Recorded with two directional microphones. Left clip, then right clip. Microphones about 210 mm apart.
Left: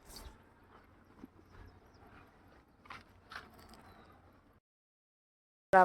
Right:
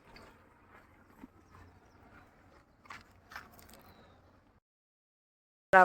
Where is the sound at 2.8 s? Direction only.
20° right (ahead or behind).